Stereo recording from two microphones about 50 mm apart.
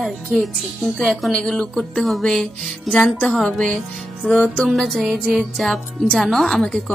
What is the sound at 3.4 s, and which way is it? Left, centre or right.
Speech, left.